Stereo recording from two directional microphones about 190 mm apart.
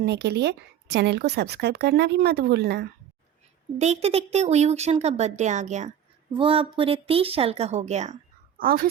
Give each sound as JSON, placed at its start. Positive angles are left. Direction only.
{"t": 0.0, "sound": "speech", "side_deg": -60}
{"t": 3.8, "sound": "a woman's voice", "side_deg": -35}
{"t": 6.3, "sound": "a woman's voice", "side_deg": -25}
{"t": 8.5, "sound": "a woman's voice", "side_deg": -50}